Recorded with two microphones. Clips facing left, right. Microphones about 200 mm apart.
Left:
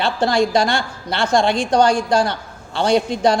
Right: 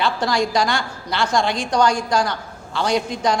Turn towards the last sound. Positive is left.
turn(degrees=30)  # may be behind; listen again after turning